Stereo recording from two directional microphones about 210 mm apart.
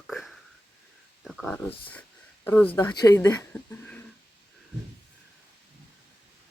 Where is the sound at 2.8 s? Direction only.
20° left (ahead or behind).